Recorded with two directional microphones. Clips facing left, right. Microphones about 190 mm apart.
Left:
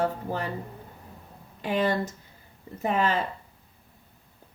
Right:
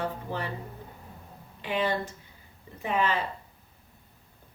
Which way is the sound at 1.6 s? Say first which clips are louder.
Left 3 dB; 45° left (ahead or behind).